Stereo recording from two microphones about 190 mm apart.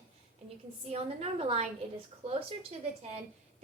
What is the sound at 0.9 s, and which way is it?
A woman's voice, 30° right (ahead or behind).